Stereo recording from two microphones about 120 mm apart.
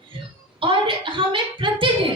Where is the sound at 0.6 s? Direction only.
45° right (ahead or behind).